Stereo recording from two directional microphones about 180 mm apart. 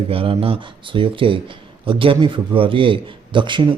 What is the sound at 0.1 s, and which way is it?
A man's voice, 30° right (ahead or behind).